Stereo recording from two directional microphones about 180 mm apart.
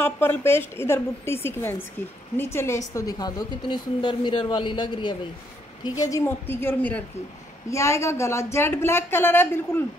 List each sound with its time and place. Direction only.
0.0 s a woman's voice: 10° left (ahead or behind)